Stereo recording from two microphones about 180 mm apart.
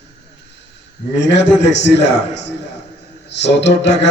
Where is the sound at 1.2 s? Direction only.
75° left (ahead or behind).